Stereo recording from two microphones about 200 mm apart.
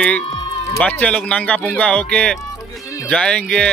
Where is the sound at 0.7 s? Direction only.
5° left (ahead or behind).